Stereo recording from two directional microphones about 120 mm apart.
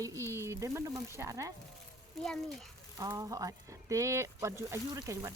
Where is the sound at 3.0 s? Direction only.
30° right (ahead or behind).